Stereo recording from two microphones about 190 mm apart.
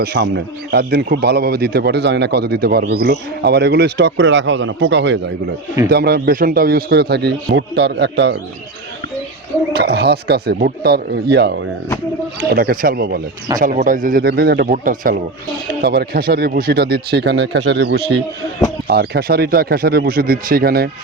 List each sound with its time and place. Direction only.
0.0 s speech: 60° right (ahead or behind)
5.9 s speech: 55° right (ahead or behind)
9.7 s speech: 60° right (ahead or behind)
12.5 s speech: 50° right (ahead or behind)
13.6 s speech: 45° right (ahead or behind)